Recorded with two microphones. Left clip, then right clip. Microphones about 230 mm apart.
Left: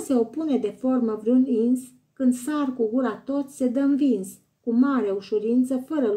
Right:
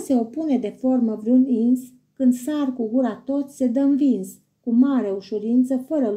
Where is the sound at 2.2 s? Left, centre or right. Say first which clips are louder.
Right 3 dB; left.